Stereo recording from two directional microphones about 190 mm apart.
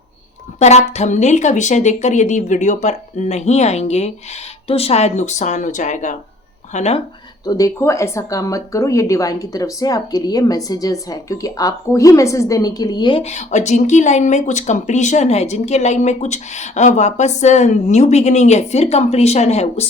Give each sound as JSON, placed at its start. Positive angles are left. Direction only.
{"t": 0.6, "sound": "speech", "side_deg": 35}
{"t": 7.4, "sound": "speech", "side_deg": 20}